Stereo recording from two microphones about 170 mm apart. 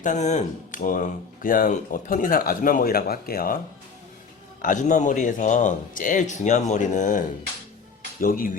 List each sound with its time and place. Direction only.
0.0 s speech: 45° left (ahead or behind)
4.6 s speech: 50° left (ahead or behind)